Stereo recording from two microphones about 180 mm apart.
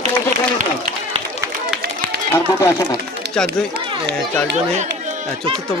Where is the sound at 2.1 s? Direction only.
65° right (ahead or behind).